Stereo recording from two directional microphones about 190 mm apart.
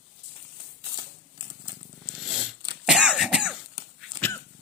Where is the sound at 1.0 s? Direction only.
25° right (ahead or behind).